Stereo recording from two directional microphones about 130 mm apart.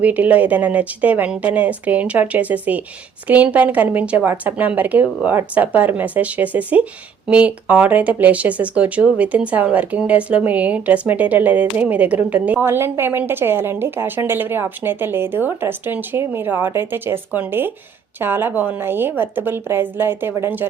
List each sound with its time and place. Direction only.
0.0 s speech: 10° right (ahead or behind)